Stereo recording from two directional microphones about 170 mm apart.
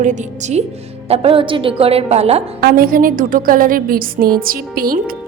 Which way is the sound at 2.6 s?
55° right (ahead or behind).